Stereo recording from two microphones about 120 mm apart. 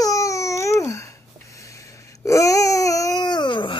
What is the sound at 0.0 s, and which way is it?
Babbling, 25° left (ahead or behind).